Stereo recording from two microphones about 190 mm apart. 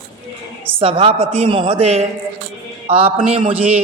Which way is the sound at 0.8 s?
30° right (ahead or behind).